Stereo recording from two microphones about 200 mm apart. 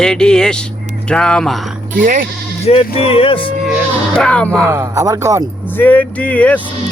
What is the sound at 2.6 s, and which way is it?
Speech, 30° left (ahead or behind).